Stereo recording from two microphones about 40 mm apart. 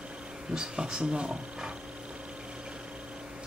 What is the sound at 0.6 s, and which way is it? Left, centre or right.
Speech, centre.